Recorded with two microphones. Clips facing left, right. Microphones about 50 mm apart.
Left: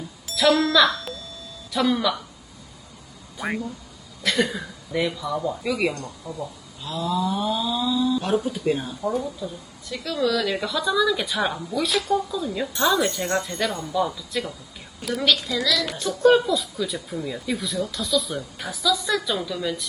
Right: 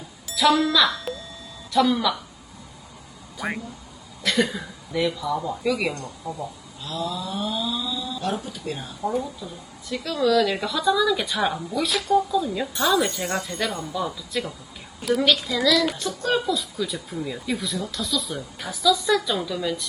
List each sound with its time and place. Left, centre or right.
0.3 s speech: centre
1.1 s a sound: centre
1.7 s a woman's voice: centre
4.2 s cough: centre
4.9 s a woman's voice: centre
6.3 s speech: right
7.3 s speech: centre
9.0 s a woman's voice: centre